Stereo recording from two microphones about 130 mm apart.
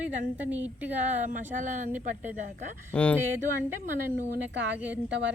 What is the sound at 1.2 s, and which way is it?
Speech, 70° right (ahead or behind).